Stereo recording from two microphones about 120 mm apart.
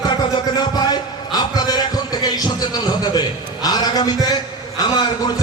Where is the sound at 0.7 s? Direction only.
35° left (ahead or behind).